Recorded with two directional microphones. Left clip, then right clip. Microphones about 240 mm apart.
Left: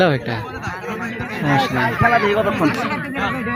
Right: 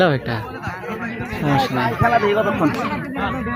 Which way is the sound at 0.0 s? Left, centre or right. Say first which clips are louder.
Even; centre.